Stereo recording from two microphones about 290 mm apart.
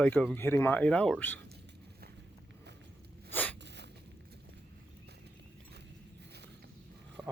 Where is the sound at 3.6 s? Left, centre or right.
Right.